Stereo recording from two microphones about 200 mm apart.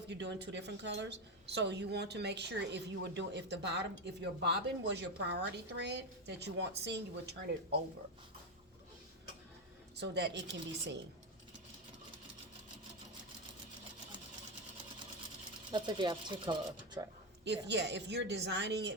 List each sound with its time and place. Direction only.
0.1 s speech: 60° right (ahead or behind)
10.0 s speech: 60° right (ahead or behind)
15.7 s speech: 20° right (ahead or behind)
17.7 s speech: 60° right (ahead or behind)